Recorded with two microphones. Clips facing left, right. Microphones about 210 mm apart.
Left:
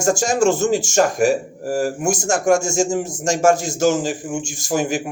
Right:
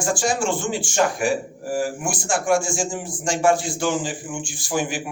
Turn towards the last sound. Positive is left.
turn(degrees=45)  # may be behind; listen again after turning